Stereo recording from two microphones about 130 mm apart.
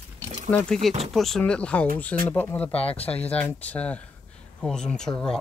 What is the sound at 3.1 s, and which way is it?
Speech, 10° left (ahead or behind).